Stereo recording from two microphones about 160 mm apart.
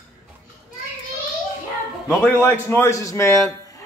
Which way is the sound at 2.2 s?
15° left (ahead or behind).